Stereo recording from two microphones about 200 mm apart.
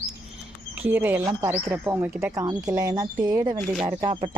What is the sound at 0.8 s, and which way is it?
Speech, 10° right (ahead or behind).